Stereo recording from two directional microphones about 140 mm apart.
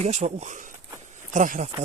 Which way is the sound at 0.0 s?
50° right (ahead or behind).